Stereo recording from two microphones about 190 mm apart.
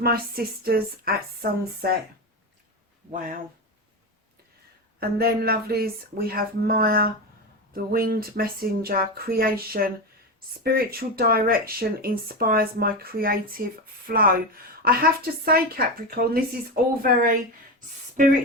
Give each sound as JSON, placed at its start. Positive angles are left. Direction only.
{"t": 0.0, "sound": "a woman's voice", "side_deg": -55}
{"t": 4.9, "sound": "a woman's voice", "side_deg": -55}
{"t": 17.7, "sound": "a sound", "side_deg": -40}